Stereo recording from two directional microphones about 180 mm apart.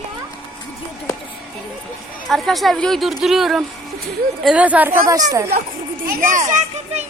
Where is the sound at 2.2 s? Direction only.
Centre (ahead or behind).